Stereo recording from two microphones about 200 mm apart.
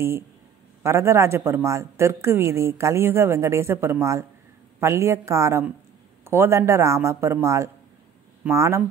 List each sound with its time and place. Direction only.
0.8 s a woman's voice: 15° right (ahead or behind)